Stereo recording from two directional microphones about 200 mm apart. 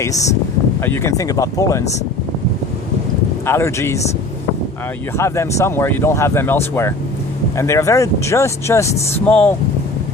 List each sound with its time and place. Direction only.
0.8 s speech: 15° left (ahead or behind)
3.4 s speech: 15° left (ahead or behind)
5.1 s speech: 15° left (ahead or behind)